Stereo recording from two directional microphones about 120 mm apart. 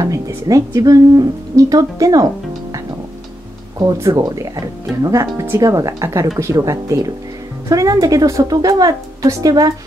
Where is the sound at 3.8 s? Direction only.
30° right (ahead or behind).